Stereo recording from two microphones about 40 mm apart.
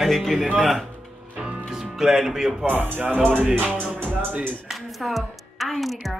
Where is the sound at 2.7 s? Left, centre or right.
Right.